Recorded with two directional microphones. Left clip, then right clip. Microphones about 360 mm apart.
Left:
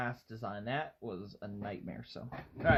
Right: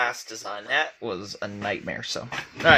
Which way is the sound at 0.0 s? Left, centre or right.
Right.